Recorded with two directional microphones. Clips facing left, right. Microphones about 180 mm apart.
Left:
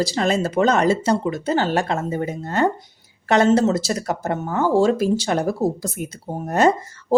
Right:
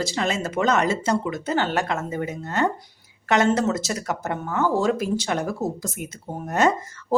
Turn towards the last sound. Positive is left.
turn(degrees=30)  # may be behind; listen again after turning